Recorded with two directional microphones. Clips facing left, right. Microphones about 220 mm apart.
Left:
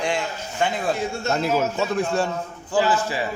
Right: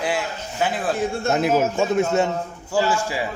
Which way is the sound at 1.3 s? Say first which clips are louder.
Right 3 dB; 55° right (ahead or behind).